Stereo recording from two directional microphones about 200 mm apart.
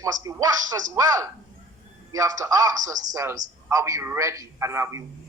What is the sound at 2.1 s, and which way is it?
A man's voice, 15° right (ahead or behind).